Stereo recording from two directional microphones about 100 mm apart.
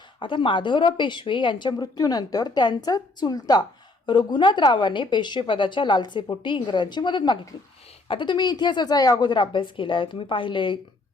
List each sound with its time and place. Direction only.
0.2 s a woman's voice: 55° left (ahead or behind)